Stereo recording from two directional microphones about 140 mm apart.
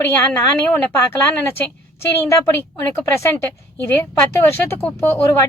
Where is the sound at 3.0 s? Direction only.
15° left (ahead or behind).